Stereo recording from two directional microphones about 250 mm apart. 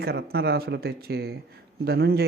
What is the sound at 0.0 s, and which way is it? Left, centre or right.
Speech, right.